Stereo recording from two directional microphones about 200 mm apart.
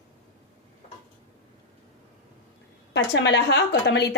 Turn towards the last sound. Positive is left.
turn(degrees=60)  # may be behind; listen again after turning